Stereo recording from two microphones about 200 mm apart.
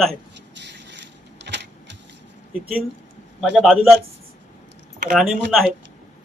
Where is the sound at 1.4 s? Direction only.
60° right (ahead or behind).